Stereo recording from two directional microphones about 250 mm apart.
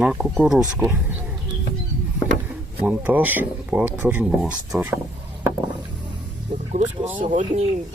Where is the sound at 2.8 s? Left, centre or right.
Centre.